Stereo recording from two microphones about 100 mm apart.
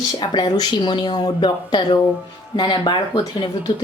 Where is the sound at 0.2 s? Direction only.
45° left (ahead or behind).